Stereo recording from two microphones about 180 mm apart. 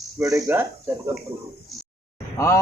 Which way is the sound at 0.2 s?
15° right (ahead or behind).